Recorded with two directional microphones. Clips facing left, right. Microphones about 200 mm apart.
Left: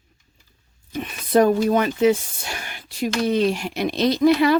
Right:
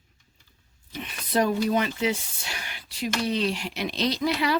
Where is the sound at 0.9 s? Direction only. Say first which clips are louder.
Left 8 dB; 50° left (ahead or behind).